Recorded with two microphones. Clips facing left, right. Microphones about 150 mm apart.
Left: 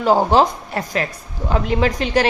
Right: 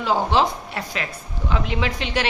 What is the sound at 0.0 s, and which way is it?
A woman's voice, 45° left (ahead or behind).